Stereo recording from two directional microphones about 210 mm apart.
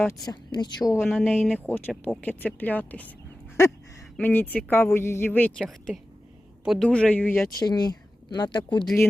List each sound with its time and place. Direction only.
0.0 s speech: 15° left (ahead or behind)
1.0 s speech: 5° left (ahead or behind)
4.2 s speech: 10° left (ahead or behind)
7.6 s speech: 20° left (ahead or behind)